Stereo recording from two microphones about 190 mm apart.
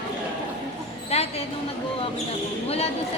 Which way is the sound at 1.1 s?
35° left (ahead or behind).